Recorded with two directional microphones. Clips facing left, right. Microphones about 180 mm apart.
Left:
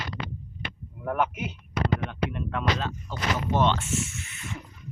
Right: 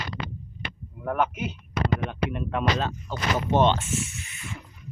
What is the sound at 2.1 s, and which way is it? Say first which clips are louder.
Speech: right 2 dB; 15° right (ahead or behind).